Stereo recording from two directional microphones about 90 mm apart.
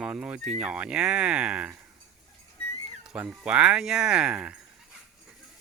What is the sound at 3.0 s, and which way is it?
Speech, 5° right (ahead or behind).